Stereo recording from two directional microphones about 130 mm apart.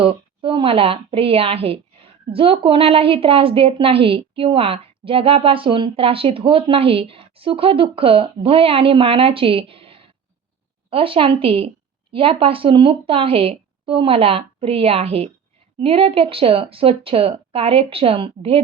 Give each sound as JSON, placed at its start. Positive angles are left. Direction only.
{"t": 0.0, "sound": "a woman's voice", "side_deg": -45}